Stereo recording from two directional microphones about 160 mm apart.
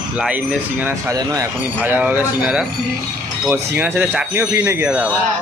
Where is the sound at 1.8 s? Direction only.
10° right (ahead or behind).